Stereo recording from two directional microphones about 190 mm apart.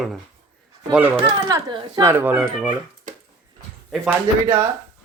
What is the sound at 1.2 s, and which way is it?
Speech, 30° right (ahead or behind).